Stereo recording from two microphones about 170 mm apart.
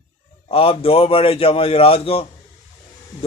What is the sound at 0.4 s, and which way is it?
Speech, 35° left (ahead or behind).